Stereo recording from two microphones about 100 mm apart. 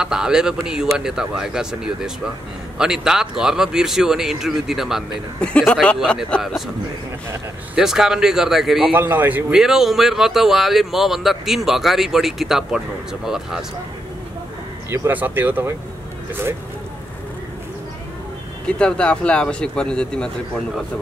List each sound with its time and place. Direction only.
0.0 s a man's voice: 5° right (ahead or behind); by 6.5 s 10° left (ahead or behind)
7.7 s speech: 5° right (ahead or behind)
8.9 s speech: 20° right (ahead or behind)
9.5 s speech: 5° right (ahead or behind)
14.9 s speech: 20° right (ahead or behind)
18.7 s speech: 10° left (ahead or behind)